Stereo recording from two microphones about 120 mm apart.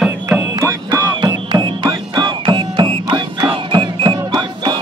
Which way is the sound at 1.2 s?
35° right (ahead or behind).